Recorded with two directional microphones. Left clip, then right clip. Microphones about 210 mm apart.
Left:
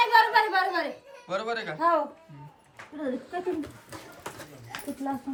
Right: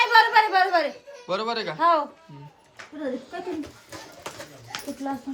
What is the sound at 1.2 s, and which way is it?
Speech, 15° right (ahead or behind).